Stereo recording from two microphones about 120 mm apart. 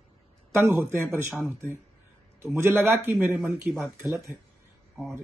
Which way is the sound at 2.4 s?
20° right (ahead or behind).